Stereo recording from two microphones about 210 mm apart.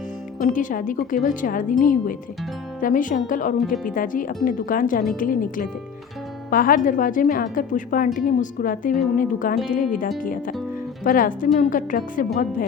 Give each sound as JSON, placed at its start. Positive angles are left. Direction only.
{"t": 0.3, "sound": "a woman's voice", "side_deg": 40}